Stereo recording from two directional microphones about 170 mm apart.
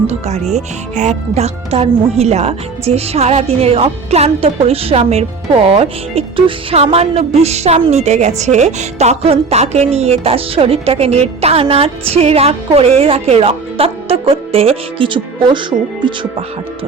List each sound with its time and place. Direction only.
0.1 s a woman's voice: 40° right (ahead or behind)